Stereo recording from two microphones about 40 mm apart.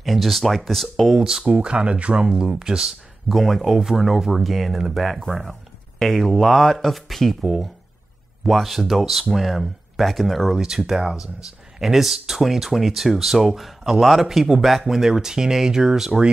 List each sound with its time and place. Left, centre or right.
0.0 s speech: centre
1.0 s speech: centre
1.4 s speech: right
3.3 s speech: centre
10.6 s speech: centre